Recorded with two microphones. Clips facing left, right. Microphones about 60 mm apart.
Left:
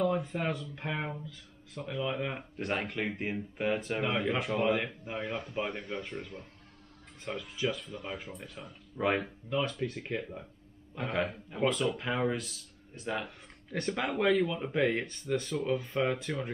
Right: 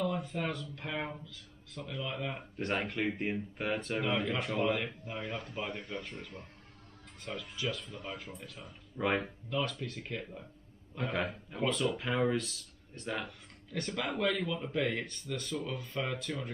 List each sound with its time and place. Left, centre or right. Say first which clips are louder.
0.0 s speech: left 4 dB; centre
2.6 s speech: even; centre
4.7 s speech: left 3 dB; left
7.6 s speech: left 5 dB; centre
9.6 s speech: left 3 dB; centre
11.0 s speech: left 2 dB; centre
13.7 s speech: left 3 dB; left